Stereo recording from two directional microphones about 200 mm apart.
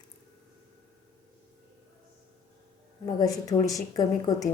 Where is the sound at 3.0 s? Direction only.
20° left (ahead or behind).